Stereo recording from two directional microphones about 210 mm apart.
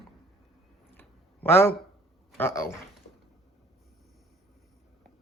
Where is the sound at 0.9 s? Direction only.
10° left (ahead or behind).